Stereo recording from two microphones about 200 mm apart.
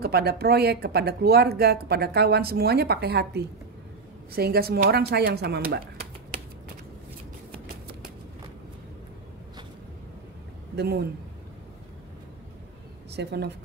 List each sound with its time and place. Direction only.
0.0 s speech: 50° right (ahead or behind)
10.8 s speech: 50° right (ahead or behind)
13.1 s speech: 55° right (ahead or behind)